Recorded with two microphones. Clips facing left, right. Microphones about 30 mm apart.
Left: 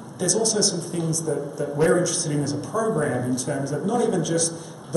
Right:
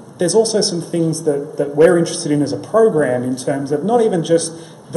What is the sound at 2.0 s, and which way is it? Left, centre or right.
Speech, right.